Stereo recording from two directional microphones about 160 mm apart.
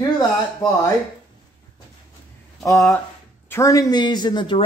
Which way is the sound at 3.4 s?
20° left (ahead or behind).